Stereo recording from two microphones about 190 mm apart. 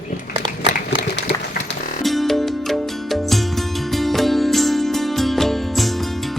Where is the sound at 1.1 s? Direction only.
65° left (ahead or behind).